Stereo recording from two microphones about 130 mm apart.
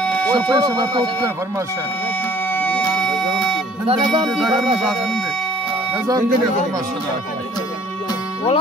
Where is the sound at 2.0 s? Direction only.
15° left (ahead or behind).